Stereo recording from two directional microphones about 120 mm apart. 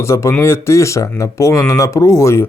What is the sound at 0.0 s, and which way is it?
Speech, 25° left (ahead or behind).